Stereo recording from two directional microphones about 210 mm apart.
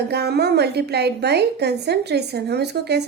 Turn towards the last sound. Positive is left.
turn(degrees=-50)  # may be behind; listen again after turning